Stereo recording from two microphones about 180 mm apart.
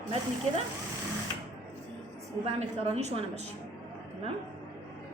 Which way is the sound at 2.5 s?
35° right (ahead or behind).